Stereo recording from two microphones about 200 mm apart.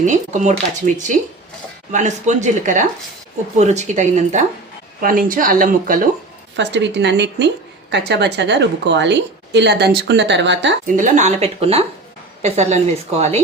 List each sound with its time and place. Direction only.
0.0 s a woman's voice: 35° right (ahead or behind)
1.9 s a woman's voice: 35° right (ahead or behind)
6.6 s a woman's voice: 60° right (ahead or behind)
10.9 s a woman's voice: 40° right (ahead or behind)